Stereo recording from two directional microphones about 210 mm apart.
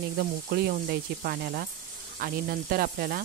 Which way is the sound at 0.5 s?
45° right (ahead or behind).